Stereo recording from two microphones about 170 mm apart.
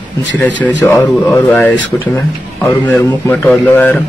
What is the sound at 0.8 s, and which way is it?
Speech, 10° left (ahead or behind).